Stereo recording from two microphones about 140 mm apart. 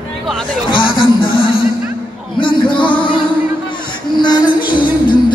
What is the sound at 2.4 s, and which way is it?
Music, 35° left (ahead or behind).